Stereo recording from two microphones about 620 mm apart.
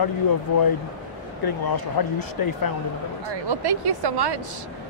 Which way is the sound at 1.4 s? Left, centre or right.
Left.